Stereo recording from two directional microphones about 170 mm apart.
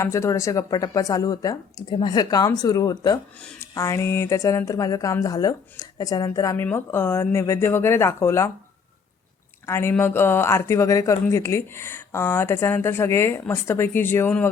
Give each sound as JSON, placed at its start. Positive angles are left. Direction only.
{"t": 0.0, "sound": "a woman's voice", "side_deg": 15}
{"t": 9.6, "sound": "speech", "side_deg": 15}